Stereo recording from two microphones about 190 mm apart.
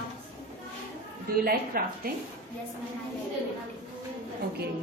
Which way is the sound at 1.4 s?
50° right (ahead or behind).